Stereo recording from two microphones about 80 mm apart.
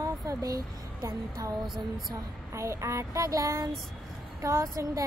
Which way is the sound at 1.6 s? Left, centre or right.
Centre.